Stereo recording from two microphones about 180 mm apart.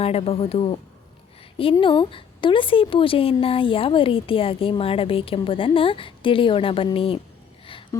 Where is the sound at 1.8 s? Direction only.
30° left (ahead or behind).